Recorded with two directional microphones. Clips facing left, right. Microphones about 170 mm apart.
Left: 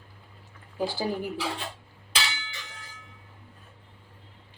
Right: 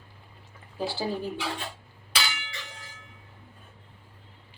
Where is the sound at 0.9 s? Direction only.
15° left (ahead or behind).